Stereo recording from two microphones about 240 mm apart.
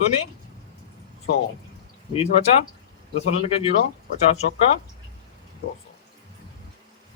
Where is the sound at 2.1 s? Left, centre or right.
Left.